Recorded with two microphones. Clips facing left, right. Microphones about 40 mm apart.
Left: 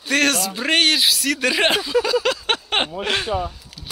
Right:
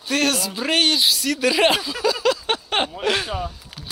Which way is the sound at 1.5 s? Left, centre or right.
Left.